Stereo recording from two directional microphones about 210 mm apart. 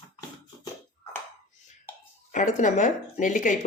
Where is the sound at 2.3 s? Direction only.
35° left (ahead or behind).